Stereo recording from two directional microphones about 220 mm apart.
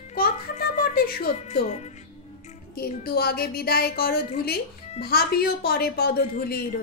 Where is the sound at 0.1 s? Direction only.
45° left (ahead or behind).